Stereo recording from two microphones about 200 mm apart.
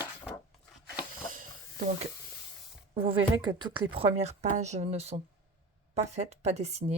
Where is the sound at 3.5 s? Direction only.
25° right (ahead or behind).